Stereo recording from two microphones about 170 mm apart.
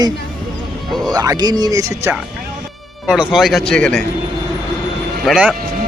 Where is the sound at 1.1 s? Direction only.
20° right (ahead or behind).